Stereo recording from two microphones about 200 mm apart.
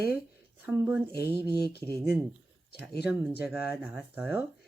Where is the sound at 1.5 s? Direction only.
55° left (ahead or behind).